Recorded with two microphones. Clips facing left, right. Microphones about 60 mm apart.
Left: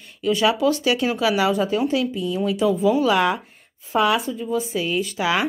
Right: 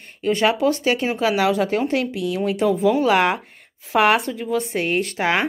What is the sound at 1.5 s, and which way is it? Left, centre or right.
Speech, right.